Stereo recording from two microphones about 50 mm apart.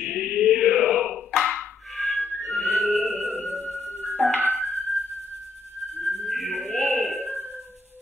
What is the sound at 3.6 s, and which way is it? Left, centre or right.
Music, left.